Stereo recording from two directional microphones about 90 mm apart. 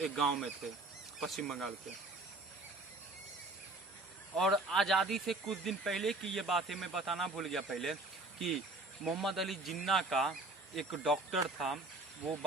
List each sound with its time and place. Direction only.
0.0 s speech: centre (ahead or behind)
4.4 s speech: centre (ahead or behind)